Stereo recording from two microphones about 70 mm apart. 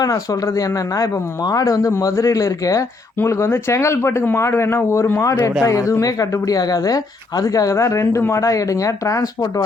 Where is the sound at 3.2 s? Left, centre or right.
Left.